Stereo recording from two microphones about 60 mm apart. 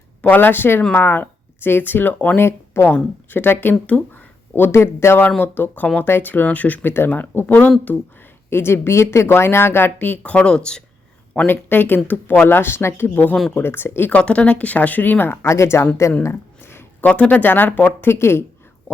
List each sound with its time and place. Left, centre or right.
0.2 s speech: left
2.5 s speech: left
2.9 s speech: left
5.4 s speech: left
7.4 s speech: left
8.4 s speech: left
10.3 s speech: centre
11.4 s speech: left
14.1 s speech: centre; by 15.4 s left
15.4 s speech: left
16.2 s a sound: left
17.1 s speech: left
18.1 s speech: left